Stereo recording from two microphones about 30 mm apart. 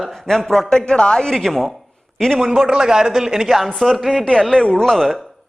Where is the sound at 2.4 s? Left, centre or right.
Centre.